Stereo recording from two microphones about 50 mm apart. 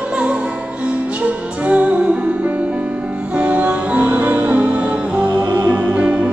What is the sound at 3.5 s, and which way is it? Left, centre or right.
Music, right.